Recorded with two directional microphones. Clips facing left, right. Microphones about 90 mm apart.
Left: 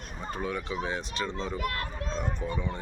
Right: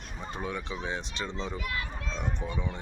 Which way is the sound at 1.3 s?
45° left (ahead or behind).